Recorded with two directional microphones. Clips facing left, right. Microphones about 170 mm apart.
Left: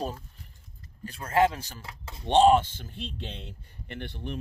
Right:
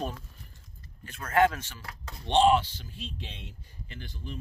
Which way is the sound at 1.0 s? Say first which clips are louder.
Left 1 dB; 30° left (ahead or behind).